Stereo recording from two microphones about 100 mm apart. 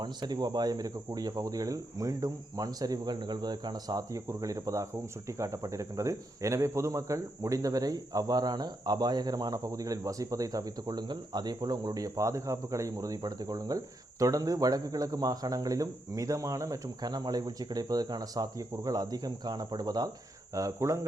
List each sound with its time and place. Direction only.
0.0 s speech: 45° right (ahead or behind)